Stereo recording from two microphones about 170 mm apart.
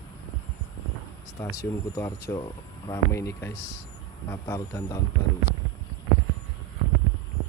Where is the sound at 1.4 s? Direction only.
20° left (ahead or behind).